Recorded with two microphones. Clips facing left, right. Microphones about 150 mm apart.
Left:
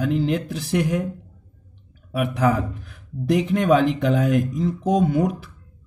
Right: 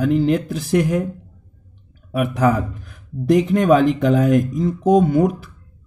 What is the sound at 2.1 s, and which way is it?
A man's voice, 45° right (ahead or behind).